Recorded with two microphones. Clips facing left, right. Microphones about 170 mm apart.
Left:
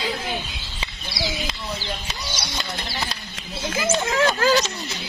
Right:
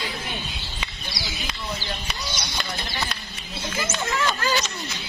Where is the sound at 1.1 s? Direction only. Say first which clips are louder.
Left 12 dB; 60° left (ahead or behind).